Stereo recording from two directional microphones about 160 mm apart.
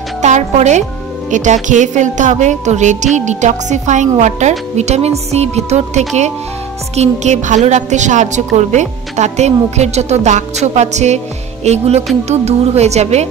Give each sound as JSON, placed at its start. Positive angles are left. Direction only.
{"t": 0.2, "sound": "a woman's voice", "side_deg": -45}
{"t": 11.6, "sound": "music", "side_deg": -40}
{"t": 12.3, "sound": "a woman's voice", "side_deg": -40}